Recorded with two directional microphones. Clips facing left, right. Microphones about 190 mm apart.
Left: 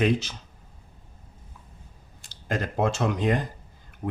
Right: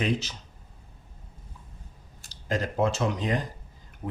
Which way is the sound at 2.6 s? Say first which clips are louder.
Left 1 dB; 55° left (ahead or behind).